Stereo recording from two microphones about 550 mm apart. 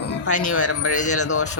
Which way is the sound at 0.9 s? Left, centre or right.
Centre.